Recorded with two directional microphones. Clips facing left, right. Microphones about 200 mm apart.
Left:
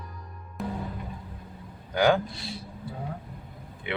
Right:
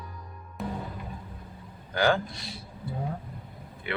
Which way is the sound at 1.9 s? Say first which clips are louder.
Left 3 dB; 15° left (ahead or behind).